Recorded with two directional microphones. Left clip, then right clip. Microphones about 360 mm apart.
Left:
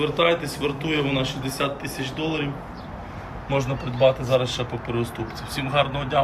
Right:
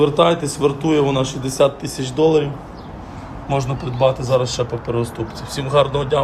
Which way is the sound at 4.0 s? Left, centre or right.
Centre.